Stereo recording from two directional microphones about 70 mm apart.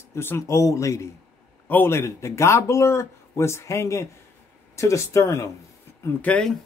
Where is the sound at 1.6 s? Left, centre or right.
Left.